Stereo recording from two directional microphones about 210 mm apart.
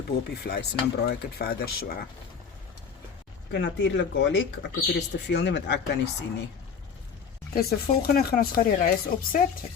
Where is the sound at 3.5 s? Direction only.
55° left (ahead or behind).